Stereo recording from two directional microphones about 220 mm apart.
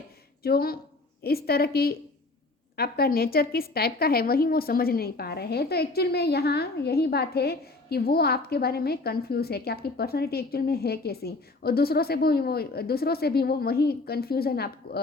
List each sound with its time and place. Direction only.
0.4 s a woman's voice: 45° left (ahead or behind)